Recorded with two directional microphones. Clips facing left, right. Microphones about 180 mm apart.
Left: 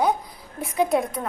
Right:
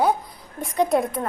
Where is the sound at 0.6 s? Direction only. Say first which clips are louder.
Right 1 dB; 5° left (ahead or behind).